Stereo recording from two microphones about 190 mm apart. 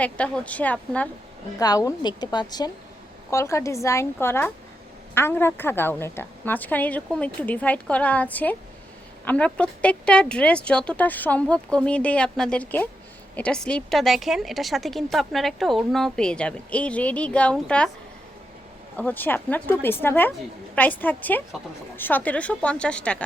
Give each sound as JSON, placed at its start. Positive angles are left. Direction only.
{"t": 0.0, "sound": "a woman's voice", "side_deg": 5}
{"t": 1.5, "sound": "a woman's voice", "side_deg": 20}
{"t": 18.9, "sound": "a woman's voice", "side_deg": 10}